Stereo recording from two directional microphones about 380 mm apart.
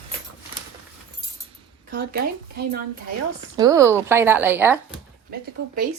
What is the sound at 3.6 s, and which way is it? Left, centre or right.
Speech, centre.